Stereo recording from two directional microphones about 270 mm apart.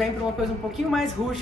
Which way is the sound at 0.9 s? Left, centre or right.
Centre.